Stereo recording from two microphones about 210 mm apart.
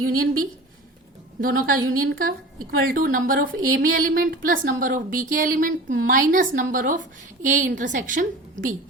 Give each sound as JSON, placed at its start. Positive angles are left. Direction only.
{"t": 0.0, "sound": "a woman's voice", "side_deg": -45}
{"t": 1.4, "sound": "a woman's voice", "side_deg": -45}